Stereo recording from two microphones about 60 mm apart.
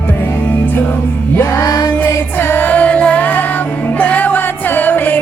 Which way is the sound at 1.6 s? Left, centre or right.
Left.